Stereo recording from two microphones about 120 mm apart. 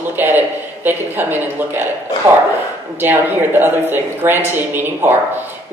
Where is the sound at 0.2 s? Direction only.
15° right (ahead or behind).